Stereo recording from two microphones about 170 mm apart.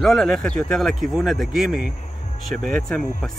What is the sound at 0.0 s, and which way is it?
Speech, centre (ahead or behind).